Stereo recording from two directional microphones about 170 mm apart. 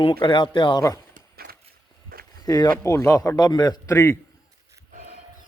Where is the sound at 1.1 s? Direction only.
65° right (ahead or behind).